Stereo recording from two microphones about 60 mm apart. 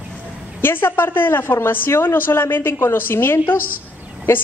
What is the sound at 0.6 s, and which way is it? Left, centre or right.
A woman's voice, left.